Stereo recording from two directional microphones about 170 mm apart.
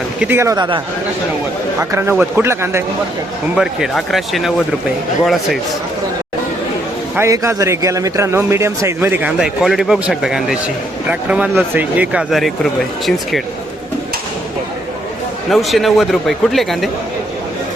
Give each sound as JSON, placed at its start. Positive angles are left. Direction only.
{"t": 0.2, "sound": "a man's voice", "side_deg": -15}
{"t": 1.8, "sound": "a man's voice", "side_deg": -15}
{"t": 3.5, "sound": "speech", "side_deg": -5}
{"t": 7.2, "sound": "a man's voice", "side_deg": -15}
{"t": 15.4, "sound": "speech", "side_deg": 0}